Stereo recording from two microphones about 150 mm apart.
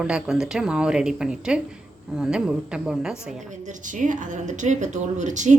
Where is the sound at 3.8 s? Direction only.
60° right (ahead or behind).